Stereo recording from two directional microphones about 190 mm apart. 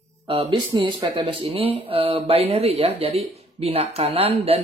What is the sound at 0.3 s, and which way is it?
Speech, 25° right (ahead or behind).